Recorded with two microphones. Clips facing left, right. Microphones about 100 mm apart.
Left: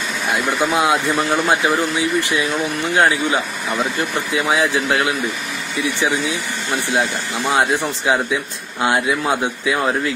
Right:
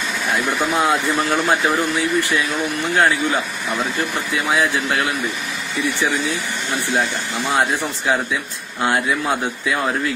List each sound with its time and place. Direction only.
0.7 s a man's voice: 15° left (ahead or behind)
7.5 s a man's voice: 20° left (ahead or behind)